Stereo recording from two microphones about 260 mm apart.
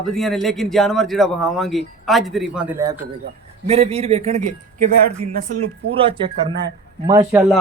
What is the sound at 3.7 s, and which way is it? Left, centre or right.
A man's voice, right.